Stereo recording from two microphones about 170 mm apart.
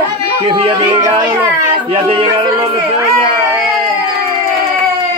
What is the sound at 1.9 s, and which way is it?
Music, 35° right (ahead or behind).